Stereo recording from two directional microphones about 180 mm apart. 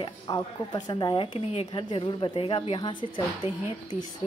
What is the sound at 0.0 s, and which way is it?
Speech, 20° left (ahead or behind).